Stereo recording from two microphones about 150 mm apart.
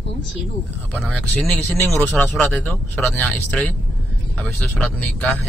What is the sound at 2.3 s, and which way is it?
Speech, 5° left (ahead or behind).